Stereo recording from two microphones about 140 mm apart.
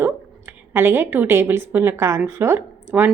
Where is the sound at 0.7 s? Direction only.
15° right (ahead or behind).